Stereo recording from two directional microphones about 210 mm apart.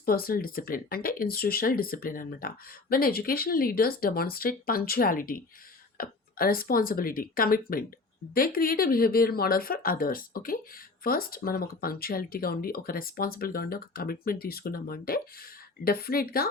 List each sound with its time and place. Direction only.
0.0 s speech: 45° left (ahead or behind)